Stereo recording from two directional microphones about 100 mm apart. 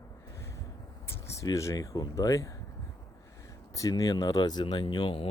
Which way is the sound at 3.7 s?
35° left (ahead or behind).